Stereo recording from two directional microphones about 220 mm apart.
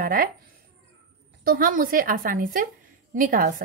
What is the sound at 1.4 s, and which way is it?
Speech, 40° right (ahead or behind).